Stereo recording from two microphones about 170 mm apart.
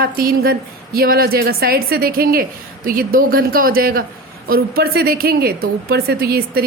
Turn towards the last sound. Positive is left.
turn(degrees=-65)  # may be behind; listen again after turning